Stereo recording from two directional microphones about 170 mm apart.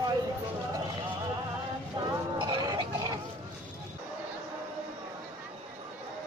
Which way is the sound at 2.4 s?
25° right (ahead or behind).